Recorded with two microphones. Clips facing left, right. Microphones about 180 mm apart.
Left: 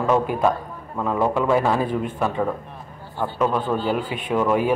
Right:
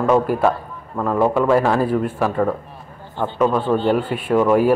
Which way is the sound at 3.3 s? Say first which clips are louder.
Right 4 dB; 5° left (ahead or behind).